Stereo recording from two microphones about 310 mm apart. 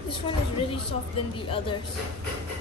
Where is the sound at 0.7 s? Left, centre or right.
Centre.